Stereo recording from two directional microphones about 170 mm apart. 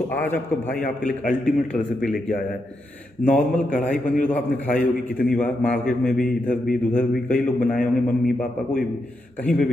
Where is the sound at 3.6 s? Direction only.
50° left (ahead or behind).